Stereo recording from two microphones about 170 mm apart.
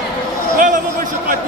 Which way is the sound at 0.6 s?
50° right (ahead or behind).